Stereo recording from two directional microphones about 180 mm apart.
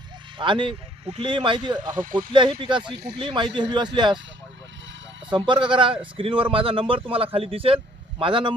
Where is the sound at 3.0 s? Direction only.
65° right (ahead or behind).